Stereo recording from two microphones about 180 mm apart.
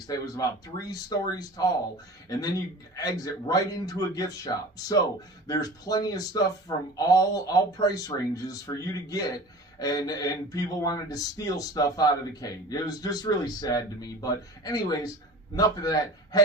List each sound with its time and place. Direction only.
0.1 s speech: 20° left (ahead or behind)